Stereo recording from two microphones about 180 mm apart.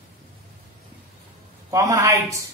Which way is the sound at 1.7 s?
20° right (ahead or behind).